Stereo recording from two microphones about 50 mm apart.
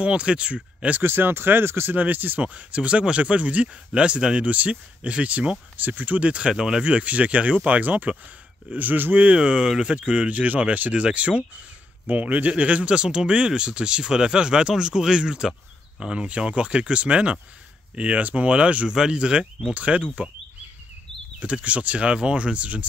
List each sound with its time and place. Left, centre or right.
0.0 s speech: right
0.9 s speech: right
2.0 s speech: right
5.8 s speech: right
9.3 s speech: centre
21.4 s speech: right